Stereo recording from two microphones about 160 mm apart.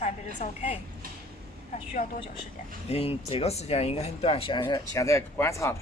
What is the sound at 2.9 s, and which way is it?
Speech, 40° left (ahead or behind).